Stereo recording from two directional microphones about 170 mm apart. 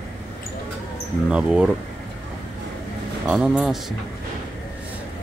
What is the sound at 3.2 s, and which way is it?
Speech, 5° right (ahead or behind).